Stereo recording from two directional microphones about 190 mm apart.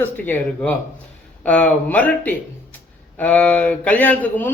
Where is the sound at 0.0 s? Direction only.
10° left (ahead or behind).